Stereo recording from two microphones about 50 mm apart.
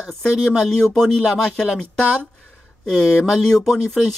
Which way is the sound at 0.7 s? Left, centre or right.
Centre.